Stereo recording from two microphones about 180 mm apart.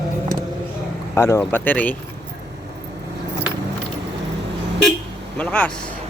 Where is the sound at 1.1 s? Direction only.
15° left (ahead or behind).